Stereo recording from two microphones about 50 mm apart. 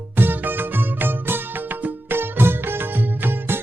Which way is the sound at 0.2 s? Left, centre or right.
Right.